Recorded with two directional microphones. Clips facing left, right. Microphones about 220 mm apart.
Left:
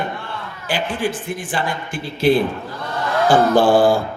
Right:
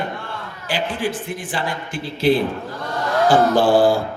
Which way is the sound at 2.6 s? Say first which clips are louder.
Even; 45° right (ahead or behind).